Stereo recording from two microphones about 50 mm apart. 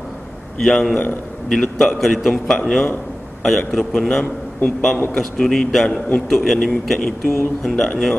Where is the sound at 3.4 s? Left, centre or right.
Centre.